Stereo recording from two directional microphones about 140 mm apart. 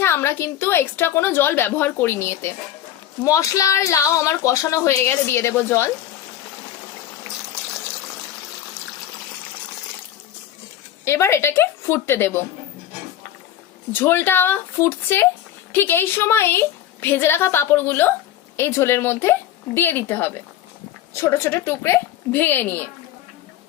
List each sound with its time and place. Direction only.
0.0 s a woman's voice: 15° left (ahead or behind)
11.0 s a woman's voice: 20° left (ahead or behind)
13.9 s a woman's voice: 15° left (ahead or behind)